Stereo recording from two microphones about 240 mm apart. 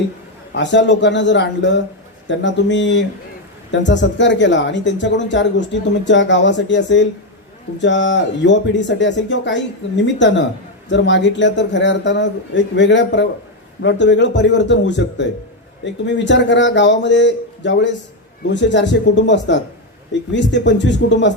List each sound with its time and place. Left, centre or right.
0.5 s speech: left